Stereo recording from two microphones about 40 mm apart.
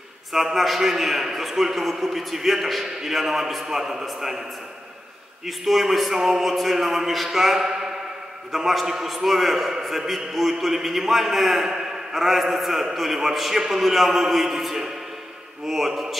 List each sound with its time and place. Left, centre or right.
0.3 s a man's voice: centre
5.7 s a man's voice: centre
6.1 s a man's voice: centre
6.4 s a man's voice: centre